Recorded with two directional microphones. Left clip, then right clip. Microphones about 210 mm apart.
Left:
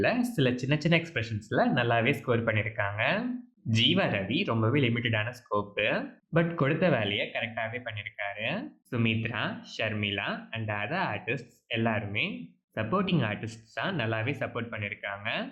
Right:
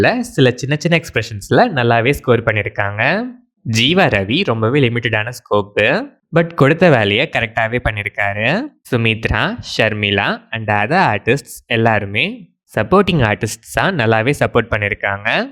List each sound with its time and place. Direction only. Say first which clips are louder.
0.0 s speech: right 13 dB; 45° right (ahead or behind)